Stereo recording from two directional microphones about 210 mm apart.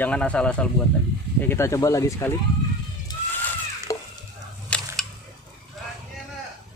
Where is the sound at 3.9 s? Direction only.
15° left (ahead or behind).